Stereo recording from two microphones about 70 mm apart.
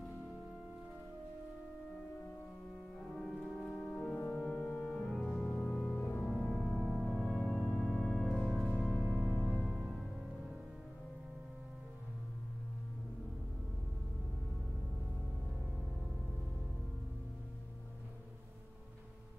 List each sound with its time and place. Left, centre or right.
3.2 s organ: centre
4.0 s music: centre
4.8 s music: centre
5.9 s music: left
6.2 s music: centre
7.6 s organ: centre
8.9 s music: centre
9.4 s music: centre